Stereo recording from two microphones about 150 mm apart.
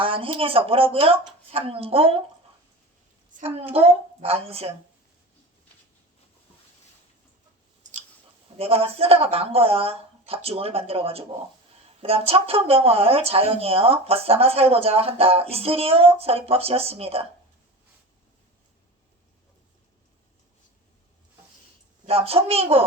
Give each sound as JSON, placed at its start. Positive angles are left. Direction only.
{"t": 0.0, "sound": "speech", "side_deg": -35}
{"t": 3.4, "sound": "speech", "side_deg": -40}
{"t": 8.5, "sound": "speech", "side_deg": -40}
{"t": 22.0, "sound": "speech", "side_deg": -40}